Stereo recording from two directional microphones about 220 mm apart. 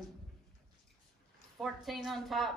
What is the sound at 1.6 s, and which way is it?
Speech, centre (ahead or behind).